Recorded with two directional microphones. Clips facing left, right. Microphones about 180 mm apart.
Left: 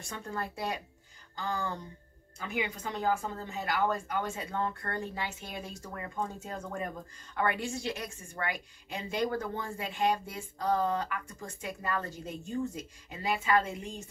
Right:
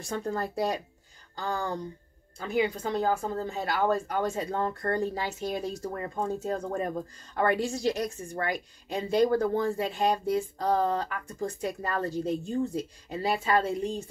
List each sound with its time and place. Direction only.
0.0 s a woman's voice: 35° right (ahead or behind)